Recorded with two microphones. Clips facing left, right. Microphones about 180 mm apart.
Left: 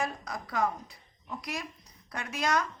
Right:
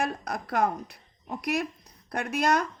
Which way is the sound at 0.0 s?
65° right (ahead or behind).